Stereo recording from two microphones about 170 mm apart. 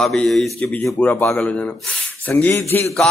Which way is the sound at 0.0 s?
Centre (ahead or behind).